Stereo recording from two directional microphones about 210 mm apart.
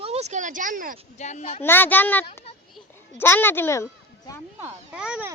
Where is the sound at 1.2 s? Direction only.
35° left (ahead or behind).